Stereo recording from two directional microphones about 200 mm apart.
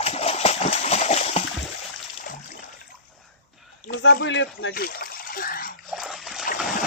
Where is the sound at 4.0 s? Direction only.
65° left (ahead or behind).